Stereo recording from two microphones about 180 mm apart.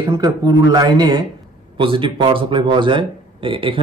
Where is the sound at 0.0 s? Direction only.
25° right (ahead or behind).